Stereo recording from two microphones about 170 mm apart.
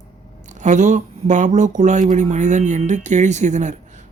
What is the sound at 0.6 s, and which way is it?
Speech, 45° right (ahead or behind).